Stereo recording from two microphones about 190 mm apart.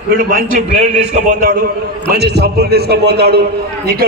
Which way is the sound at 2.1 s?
60° right (ahead or behind).